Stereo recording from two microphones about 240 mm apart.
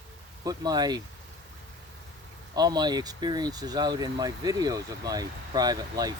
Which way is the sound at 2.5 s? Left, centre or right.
Centre.